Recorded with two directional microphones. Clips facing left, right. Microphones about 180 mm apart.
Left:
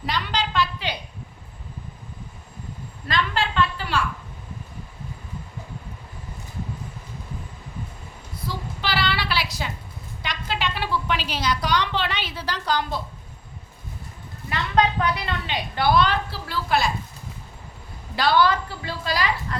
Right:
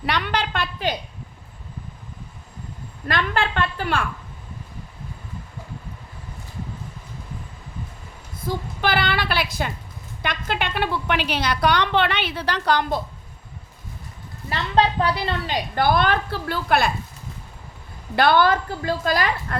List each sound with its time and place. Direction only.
0.0 s a woman's voice: 60° right (ahead or behind)
3.1 s a woman's voice: 55° right (ahead or behind)
8.4 s a woman's voice: 50° right (ahead or behind)
14.5 s a woman's voice: 30° right (ahead or behind); by 16.9 s 55° right (ahead or behind)
18.2 s a woman's voice: 55° right (ahead or behind)